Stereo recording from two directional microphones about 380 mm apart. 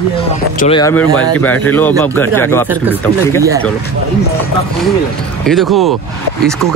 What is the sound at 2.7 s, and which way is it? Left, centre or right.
Speech, centre.